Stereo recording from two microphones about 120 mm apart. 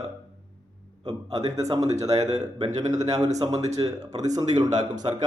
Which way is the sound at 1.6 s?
30° right (ahead or behind).